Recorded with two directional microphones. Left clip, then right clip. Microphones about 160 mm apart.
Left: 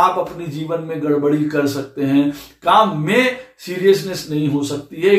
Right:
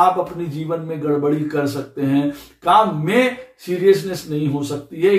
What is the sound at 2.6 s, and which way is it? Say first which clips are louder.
Speech: left 1 dB; 10° right (ahead or behind).